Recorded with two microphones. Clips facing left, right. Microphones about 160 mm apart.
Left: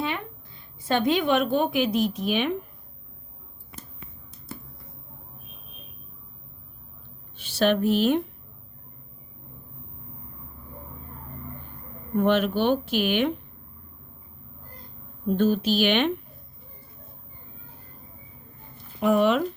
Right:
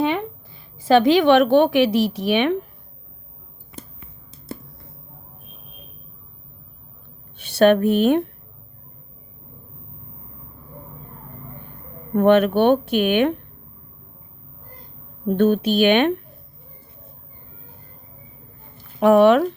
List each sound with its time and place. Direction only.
0.8 s a woman's voice: 90° right; by 2.6 s 75° right (ahead or behind)
7.3 s speech: 60° right (ahead or behind)
12.1 s speech: 60° right (ahead or behind)
15.3 s speech: 60° right (ahead or behind)
18.9 s speech: 65° right (ahead or behind)